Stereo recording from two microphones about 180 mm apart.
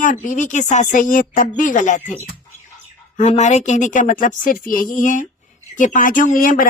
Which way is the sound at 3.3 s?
40° left (ahead or behind).